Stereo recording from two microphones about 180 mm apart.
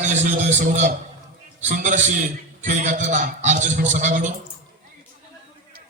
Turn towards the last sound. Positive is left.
turn(degrees=-45)  # may be behind; listen again after turning